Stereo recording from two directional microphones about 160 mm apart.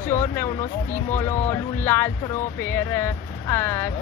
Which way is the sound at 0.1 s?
15° left (ahead or behind).